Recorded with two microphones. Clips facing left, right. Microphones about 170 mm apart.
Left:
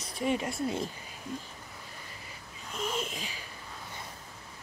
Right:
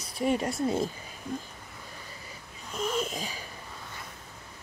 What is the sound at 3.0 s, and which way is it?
Wheeze, 40° right (ahead or behind).